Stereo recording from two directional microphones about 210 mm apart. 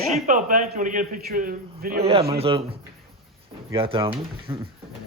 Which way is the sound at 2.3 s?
25° right (ahead or behind).